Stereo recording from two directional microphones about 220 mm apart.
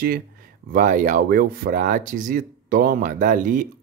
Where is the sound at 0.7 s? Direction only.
40° right (ahead or behind).